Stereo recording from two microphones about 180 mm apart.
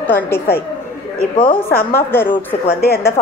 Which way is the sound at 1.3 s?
30° left (ahead or behind).